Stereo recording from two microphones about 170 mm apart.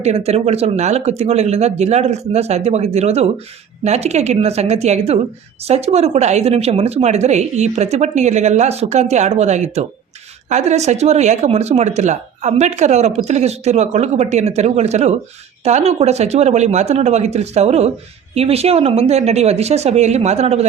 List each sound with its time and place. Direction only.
0.0 s speech: 40° right (ahead or behind)